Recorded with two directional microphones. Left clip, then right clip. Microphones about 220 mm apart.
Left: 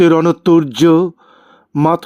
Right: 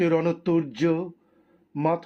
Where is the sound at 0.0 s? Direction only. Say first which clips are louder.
Left 12 dB; 50° left (ahead or behind).